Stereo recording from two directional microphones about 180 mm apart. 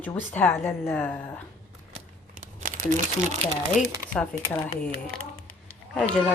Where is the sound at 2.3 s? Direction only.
45° right (ahead or behind).